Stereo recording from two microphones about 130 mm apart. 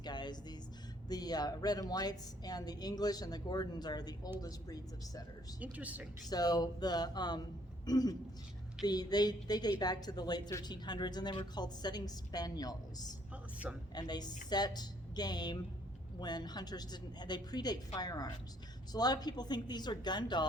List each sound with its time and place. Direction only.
0.0 s music: 35° left (ahead or behind)
1.0 s a woman's voice: 30° left (ahead or behind)
5.5 s speech: 10° right (ahead or behind)
6.2 s a woman's voice: 30° left (ahead or behind)
13.3 s a sound: 10° right (ahead or behind)
13.9 s a woman's voice: 30° left (ahead or behind)